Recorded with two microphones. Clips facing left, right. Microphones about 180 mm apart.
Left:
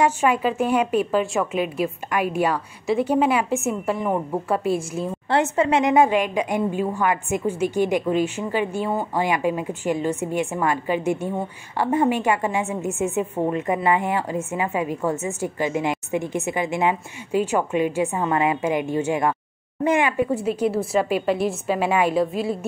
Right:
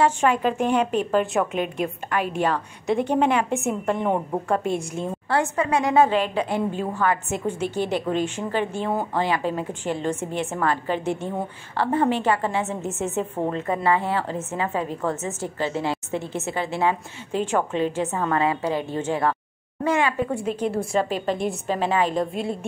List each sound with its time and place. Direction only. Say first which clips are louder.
0.0 s a woman's voice: even; 10° left (ahead or behind)
5.3 s a woman's voice: left 3 dB; 25° left (ahead or behind)
20.3 s a woman's voice: left 3 dB; 5° left (ahead or behind)